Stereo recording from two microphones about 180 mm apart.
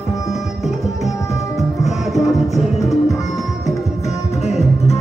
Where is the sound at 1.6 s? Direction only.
Centre (ahead or behind).